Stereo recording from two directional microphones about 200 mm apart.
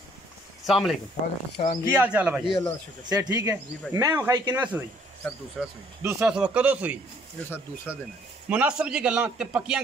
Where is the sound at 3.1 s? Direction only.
20° right (ahead or behind).